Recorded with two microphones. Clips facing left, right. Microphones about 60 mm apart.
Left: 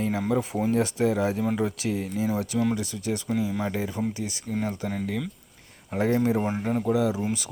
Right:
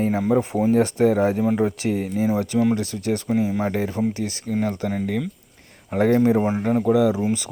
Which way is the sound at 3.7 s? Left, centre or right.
Right.